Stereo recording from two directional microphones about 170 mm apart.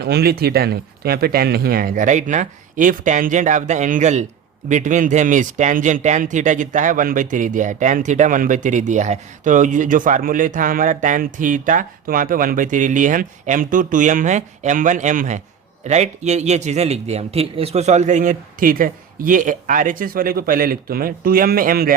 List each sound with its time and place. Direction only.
0.0 s speech: 70° right (ahead or behind)